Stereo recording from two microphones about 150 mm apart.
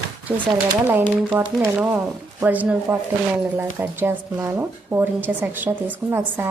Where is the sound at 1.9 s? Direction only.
15° right (ahead or behind).